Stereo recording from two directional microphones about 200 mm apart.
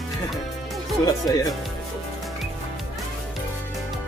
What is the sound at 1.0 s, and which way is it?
Speech, 15° left (ahead or behind).